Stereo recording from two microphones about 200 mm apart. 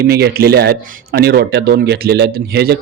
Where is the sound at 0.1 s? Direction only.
50° right (ahead or behind).